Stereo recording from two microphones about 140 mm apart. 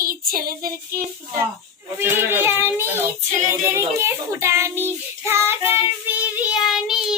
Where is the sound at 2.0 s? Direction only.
15° right (ahead or behind).